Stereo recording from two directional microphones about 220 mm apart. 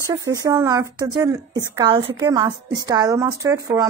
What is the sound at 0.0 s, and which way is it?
Speech, 15° right (ahead or behind).